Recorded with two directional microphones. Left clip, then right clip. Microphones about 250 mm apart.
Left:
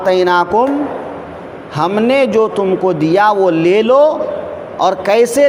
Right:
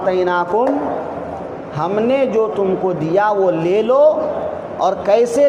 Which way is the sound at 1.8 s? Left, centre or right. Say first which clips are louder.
Left 4 dB; left.